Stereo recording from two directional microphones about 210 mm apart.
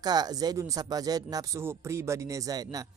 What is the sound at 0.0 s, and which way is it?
Speech, 20° right (ahead or behind).